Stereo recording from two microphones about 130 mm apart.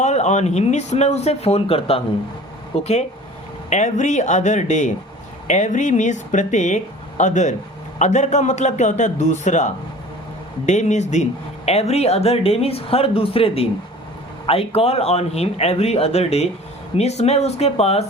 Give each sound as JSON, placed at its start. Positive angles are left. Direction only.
{"t": 0.0, "sound": "speech", "side_deg": 60}
{"t": 2.8, "sound": "speech", "side_deg": 60}
{"t": 10.7, "sound": "speech", "side_deg": 65}